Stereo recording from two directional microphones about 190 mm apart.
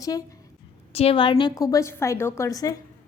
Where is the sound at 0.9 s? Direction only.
30° left (ahead or behind).